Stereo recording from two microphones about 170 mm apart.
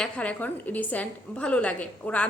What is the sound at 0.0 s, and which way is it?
A woman's voice, 5° left (ahead or behind).